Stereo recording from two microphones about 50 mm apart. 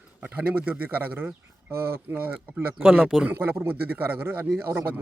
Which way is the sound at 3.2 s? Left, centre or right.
Right.